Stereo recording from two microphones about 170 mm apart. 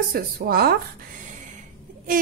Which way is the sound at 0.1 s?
65° right (ahead or behind).